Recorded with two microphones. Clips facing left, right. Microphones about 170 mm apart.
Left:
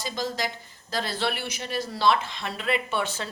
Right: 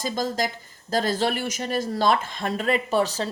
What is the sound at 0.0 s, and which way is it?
A woman's voice, 45° right (ahead or behind).